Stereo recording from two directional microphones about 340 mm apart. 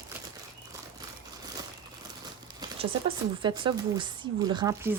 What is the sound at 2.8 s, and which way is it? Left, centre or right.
Speech, centre.